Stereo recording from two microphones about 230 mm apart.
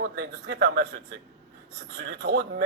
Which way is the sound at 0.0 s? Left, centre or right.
Right.